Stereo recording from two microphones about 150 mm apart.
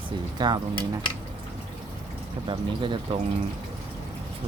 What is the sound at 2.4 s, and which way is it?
Speech, 35° right (ahead or behind).